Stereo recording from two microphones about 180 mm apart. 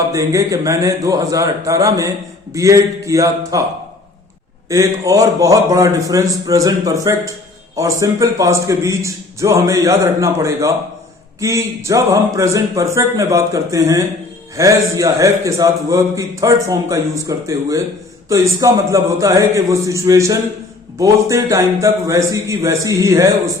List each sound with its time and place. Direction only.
0.1 s a man's voice: 20° right (ahead or behind)
4.7 s a man's voice: 20° right (ahead or behind)